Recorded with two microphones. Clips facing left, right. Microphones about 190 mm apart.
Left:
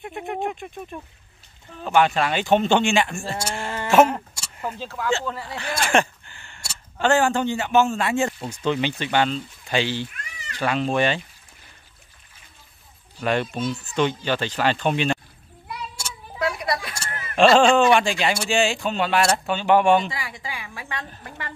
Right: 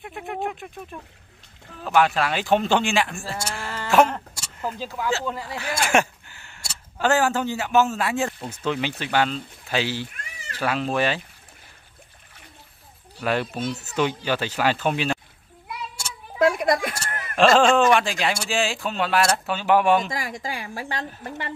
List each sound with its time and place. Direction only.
0.0 s speech: centre (ahead or behind)
3.6 s a sound: 15° left (ahead or behind)
3.9 s speech: centre (ahead or behind)
13.2 s speech: 5° right (ahead or behind)
16.3 s a sound: 50° right (ahead or behind)
17.4 s speech: centre (ahead or behind)
20.1 s a woman's voice: 45° right (ahead or behind)